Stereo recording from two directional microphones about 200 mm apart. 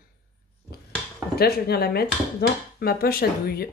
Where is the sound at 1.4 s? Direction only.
50° left (ahead or behind).